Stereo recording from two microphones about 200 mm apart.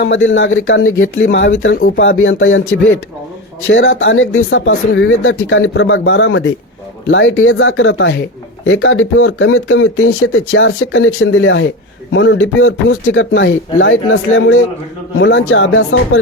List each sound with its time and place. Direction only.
0.0 s speech: 70° left (ahead or behind)
1.3 s speech: 65° left (ahead or behind)
3.7 s speech: 70° left (ahead or behind)